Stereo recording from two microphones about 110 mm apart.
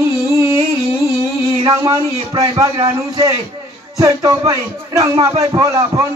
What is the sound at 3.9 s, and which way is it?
A man's voice, 30° right (ahead or behind).